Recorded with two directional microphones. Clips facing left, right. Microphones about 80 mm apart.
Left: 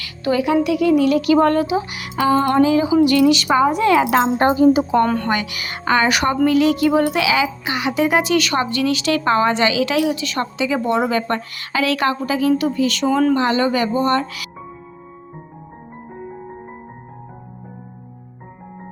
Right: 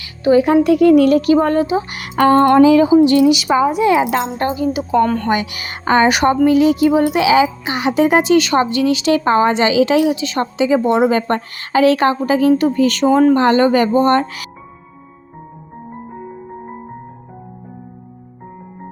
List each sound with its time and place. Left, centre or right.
0.0 s music: right
0.4 s speech: right
2.0 s a sound: right
3.0 s speech: right
3.3 s a woman's voice: centre
4.4 s speech: left
4.9 s speech: centre
5.3 s speech: right
7.2 s speech: right
11.3 s speech: right
13.1 s speech: right
13.3 s speech: right